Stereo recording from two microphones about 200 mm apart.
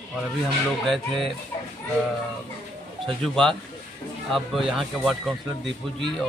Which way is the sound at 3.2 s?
Centre (ahead or behind).